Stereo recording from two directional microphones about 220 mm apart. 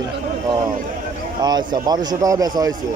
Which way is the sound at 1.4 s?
20° right (ahead or behind).